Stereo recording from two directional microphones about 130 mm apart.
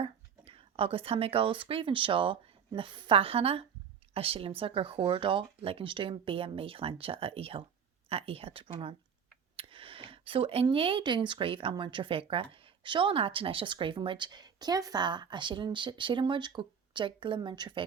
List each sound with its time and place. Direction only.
0.0 s a woman's voice: 45° right (ahead or behind)